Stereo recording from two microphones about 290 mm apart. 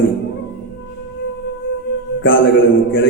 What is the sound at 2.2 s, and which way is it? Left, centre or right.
Speech, left.